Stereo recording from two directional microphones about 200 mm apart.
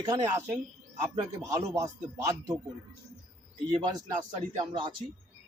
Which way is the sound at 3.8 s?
20° right (ahead or behind).